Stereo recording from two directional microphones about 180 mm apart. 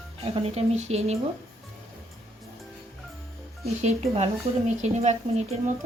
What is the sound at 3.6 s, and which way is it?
Speech, 35° right (ahead or behind).